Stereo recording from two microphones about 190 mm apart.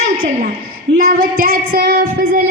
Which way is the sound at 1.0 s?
50° right (ahead or behind).